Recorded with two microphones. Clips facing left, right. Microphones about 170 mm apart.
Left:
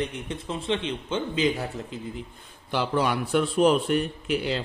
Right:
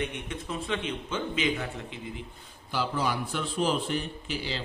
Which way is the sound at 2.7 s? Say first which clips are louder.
Left 5 dB; 65° left (ahead or behind).